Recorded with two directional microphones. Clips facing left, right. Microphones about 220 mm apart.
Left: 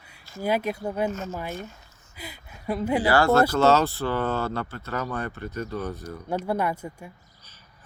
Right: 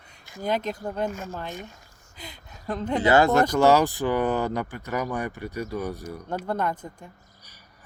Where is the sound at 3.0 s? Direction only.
20° right (ahead or behind).